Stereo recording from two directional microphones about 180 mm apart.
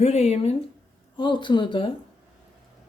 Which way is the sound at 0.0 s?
35° left (ahead or behind).